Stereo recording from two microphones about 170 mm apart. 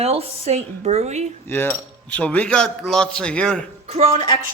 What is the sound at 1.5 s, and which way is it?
Speech, 10° left (ahead or behind).